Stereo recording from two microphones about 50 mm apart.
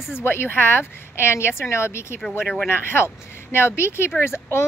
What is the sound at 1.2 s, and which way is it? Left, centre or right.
Speech, left.